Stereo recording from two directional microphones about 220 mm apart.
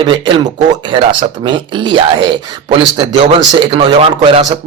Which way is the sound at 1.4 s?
20° right (ahead or behind).